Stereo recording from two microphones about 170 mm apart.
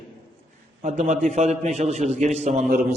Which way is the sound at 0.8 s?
50° right (ahead or behind).